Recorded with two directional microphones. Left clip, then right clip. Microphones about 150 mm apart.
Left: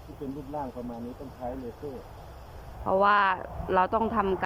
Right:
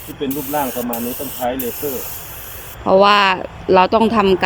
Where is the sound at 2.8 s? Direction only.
15° right (ahead or behind).